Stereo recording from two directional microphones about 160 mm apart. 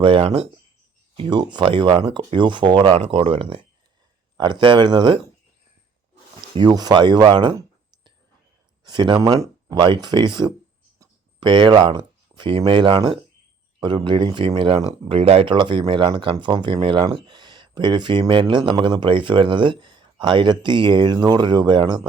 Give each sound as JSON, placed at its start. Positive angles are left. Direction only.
{"t": 0.0, "sound": "speech", "side_deg": -35}
{"t": 6.5, "sound": "speech", "side_deg": -25}
{"t": 8.8, "sound": "speech", "side_deg": -30}